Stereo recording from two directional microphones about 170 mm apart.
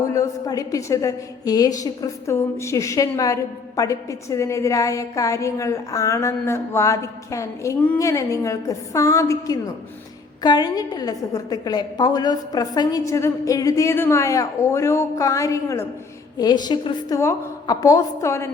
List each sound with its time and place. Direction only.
0.1 s a woman's voice: 20° left (ahead or behind)